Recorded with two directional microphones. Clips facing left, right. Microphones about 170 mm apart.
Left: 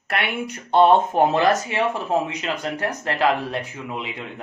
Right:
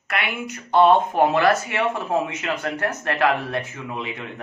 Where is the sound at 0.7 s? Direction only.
25° left (ahead or behind).